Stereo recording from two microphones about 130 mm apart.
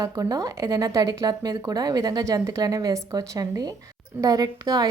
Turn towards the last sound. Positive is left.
turn(degrees=-30)  # may be behind; listen again after turning